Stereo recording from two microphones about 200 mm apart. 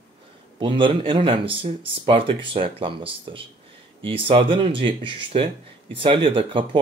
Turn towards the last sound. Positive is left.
turn(degrees=-25)  # may be behind; listen again after turning